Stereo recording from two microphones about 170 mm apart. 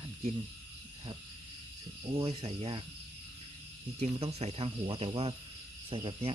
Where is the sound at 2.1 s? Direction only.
35° right (ahead or behind).